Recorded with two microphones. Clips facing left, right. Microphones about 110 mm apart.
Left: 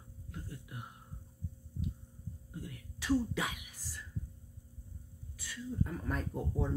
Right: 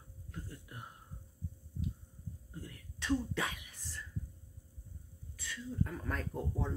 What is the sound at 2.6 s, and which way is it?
Whispering, 5° left (ahead or behind).